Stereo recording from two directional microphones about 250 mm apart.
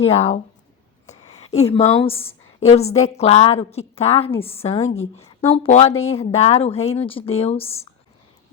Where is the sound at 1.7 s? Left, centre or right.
Left.